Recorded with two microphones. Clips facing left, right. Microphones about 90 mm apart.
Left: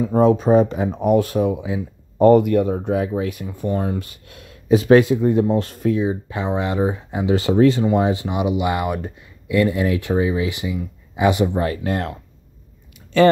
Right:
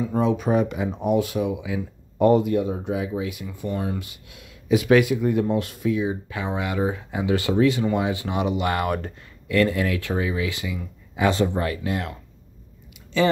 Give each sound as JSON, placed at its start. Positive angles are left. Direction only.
{"t": 0.0, "sound": "speech", "side_deg": 40}
{"t": 2.3, "sound": "speech", "side_deg": 55}
{"t": 5.7, "sound": "speech", "side_deg": 40}
{"t": 6.0, "sound": "speech", "side_deg": 30}
{"t": 7.5, "sound": "speech", "side_deg": 35}
{"t": 8.0, "sound": "speech", "side_deg": 25}
{"t": 11.8, "sound": "speech", "side_deg": 40}